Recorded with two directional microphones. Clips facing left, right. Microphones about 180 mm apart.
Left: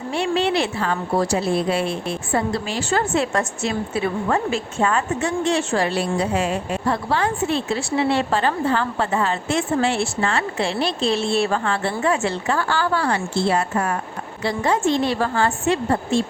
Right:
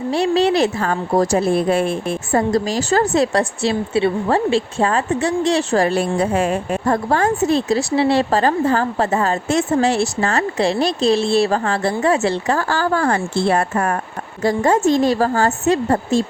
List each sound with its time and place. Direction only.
0.1 s a woman's voice: 35° right (ahead or behind)